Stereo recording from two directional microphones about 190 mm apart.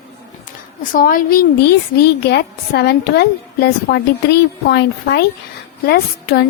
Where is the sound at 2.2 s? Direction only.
60° left (ahead or behind).